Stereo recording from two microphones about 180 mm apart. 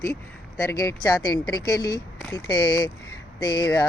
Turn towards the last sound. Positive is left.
turn(degrees=20)  # may be behind; listen again after turning